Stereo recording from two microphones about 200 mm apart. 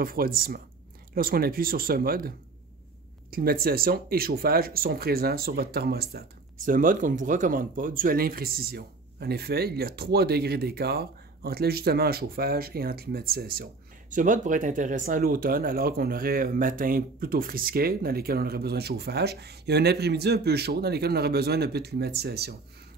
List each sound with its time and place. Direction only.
0.0 s speech: 45° right (ahead or behind)